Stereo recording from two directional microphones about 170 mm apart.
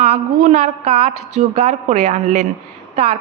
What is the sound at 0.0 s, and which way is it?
A woman's voice, 40° right (ahead or behind).